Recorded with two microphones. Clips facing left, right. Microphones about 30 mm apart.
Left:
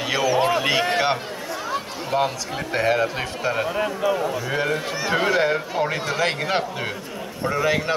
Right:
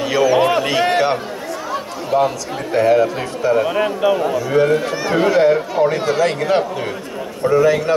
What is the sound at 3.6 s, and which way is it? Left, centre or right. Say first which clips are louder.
Speech: right 6 dB; right.